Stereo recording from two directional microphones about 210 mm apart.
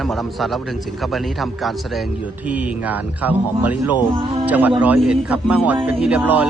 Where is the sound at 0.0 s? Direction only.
Centre (ahead or behind).